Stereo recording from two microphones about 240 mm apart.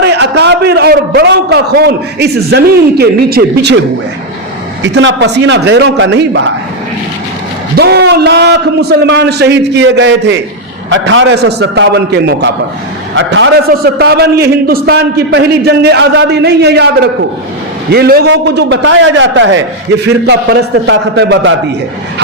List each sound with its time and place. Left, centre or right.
0.0 s a man's voice: right
4.8 s a man's voice: right
7.8 s a man's voice: right